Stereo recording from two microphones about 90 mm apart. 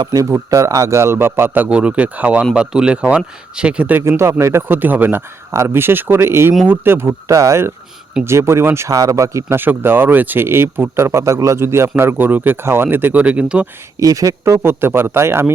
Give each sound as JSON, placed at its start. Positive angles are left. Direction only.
{"t": 0.0, "sound": "speech", "side_deg": -40}
{"t": 4.2, "sound": "speech", "side_deg": -35}
{"t": 9.6, "sound": "speech", "side_deg": -25}
{"t": 14.0, "sound": "speech", "side_deg": -40}